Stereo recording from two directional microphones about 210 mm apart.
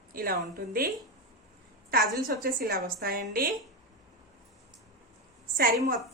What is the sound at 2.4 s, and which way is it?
A woman's voice, 45° right (ahead or behind).